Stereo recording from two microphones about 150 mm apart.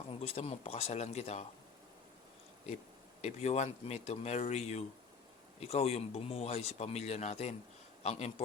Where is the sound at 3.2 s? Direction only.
45° left (ahead or behind).